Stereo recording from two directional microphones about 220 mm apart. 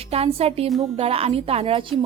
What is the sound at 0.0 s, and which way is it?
A woman's voice, 25° right (ahead or behind).